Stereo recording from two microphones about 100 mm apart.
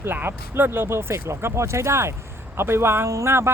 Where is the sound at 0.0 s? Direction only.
20° right (ahead or behind).